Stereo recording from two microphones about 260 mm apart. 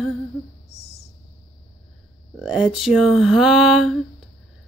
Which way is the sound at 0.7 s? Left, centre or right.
Left.